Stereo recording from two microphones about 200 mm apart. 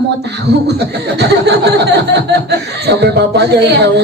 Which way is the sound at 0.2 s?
55° right (ahead or behind).